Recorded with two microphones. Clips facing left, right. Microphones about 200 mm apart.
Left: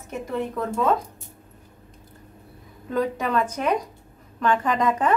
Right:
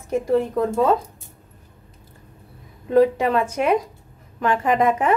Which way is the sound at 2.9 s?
25° right (ahead or behind).